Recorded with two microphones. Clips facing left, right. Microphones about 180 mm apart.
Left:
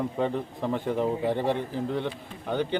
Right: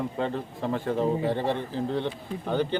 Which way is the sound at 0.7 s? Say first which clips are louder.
Right 1 dB; 15° left (ahead or behind).